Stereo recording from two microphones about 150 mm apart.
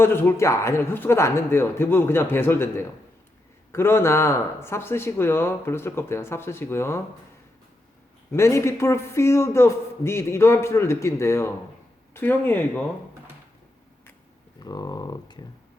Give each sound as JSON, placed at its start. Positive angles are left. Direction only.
{"t": 0.0, "sound": "speech", "side_deg": 15}
{"t": 8.3, "sound": "speech", "side_deg": 15}
{"t": 14.6, "sound": "speech", "side_deg": 25}